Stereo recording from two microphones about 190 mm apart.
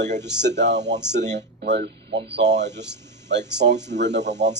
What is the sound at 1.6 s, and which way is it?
Speech, 55° right (ahead or behind).